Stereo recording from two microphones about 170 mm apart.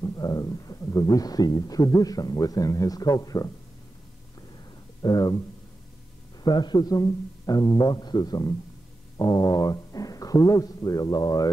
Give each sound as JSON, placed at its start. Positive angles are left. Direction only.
{"t": 0.0, "sound": "speech", "side_deg": 20}
{"t": 5.0, "sound": "speech", "side_deg": 20}
{"t": 6.4, "sound": "speech", "side_deg": 25}